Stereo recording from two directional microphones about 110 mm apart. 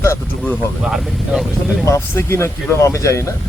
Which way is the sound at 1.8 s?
25° left (ahead or behind).